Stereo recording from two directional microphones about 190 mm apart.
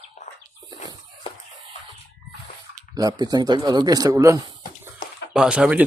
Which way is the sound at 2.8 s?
20° right (ahead or behind).